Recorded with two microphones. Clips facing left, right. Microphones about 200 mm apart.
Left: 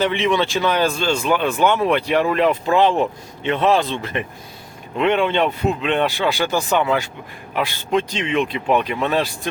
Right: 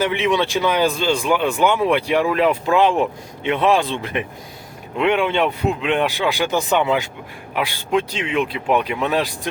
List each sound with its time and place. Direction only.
0.0 s a man's voice: 10° right (ahead or behind)